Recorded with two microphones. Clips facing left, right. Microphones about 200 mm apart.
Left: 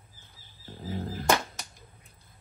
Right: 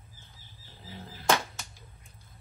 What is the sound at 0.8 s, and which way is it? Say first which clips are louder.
Music: left 11 dB; 45° left (ahead or behind).